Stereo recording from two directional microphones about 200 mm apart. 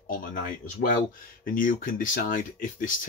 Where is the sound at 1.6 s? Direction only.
45° left (ahead or behind).